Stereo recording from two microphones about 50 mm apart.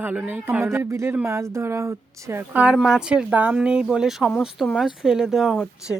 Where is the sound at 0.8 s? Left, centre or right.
Right.